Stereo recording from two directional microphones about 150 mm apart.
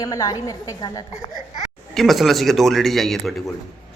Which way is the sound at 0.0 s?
20° left (ahead or behind).